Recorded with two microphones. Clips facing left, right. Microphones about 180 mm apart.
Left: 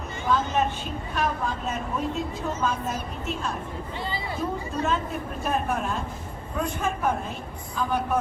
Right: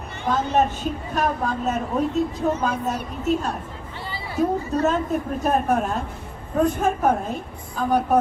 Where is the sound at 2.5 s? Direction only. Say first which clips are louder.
Right 3 dB; 65° right (ahead or behind).